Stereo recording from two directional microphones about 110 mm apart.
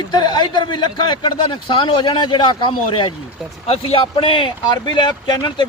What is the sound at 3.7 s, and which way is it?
A man's voice, 60° left (ahead or behind).